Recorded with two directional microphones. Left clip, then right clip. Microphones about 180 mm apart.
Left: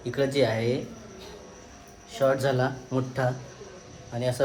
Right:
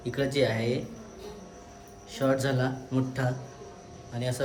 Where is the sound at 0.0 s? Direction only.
5° right (ahead or behind).